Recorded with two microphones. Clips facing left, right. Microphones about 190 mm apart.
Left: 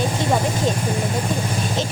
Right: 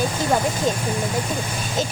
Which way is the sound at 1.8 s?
Centre (ahead or behind).